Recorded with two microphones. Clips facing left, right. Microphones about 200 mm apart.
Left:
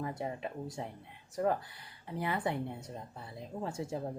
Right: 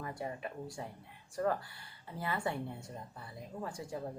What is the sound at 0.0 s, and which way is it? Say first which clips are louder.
Speech: left 3 dB; 25° left (ahead or behind).